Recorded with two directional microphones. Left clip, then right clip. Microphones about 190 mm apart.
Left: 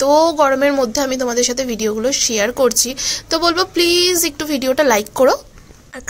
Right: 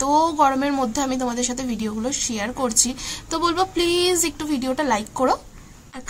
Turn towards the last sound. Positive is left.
turn(degrees=25)  # may be behind; listen again after turning